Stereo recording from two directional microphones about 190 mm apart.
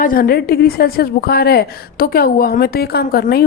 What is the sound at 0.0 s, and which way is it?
A woman's voice, 50° left (ahead or behind).